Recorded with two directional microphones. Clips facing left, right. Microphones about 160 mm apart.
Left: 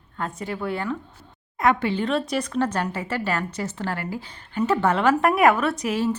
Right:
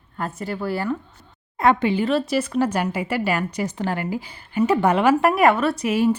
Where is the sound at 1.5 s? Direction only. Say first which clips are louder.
Right 3 dB; 30° right (ahead or behind).